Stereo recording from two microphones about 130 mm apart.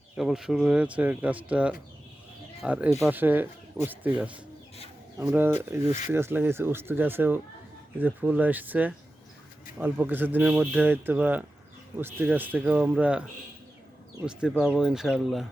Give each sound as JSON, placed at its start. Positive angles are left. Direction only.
{"t": 0.2, "sound": "speech", "side_deg": -5}
{"t": 14.3, "sound": "speech", "side_deg": -5}